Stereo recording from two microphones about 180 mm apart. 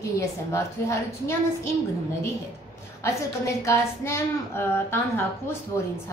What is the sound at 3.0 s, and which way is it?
A woman's voice, 15° left (ahead or behind).